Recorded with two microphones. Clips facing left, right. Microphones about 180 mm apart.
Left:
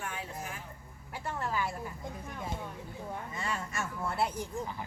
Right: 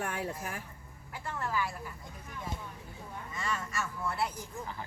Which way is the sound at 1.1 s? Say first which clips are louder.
Even; 25° left (ahead or behind).